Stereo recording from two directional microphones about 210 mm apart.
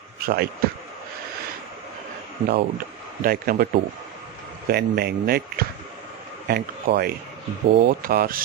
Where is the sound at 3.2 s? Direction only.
45° right (ahead or behind).